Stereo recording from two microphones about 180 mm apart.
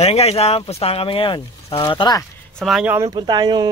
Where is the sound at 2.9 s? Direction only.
20° right (ahead or behind).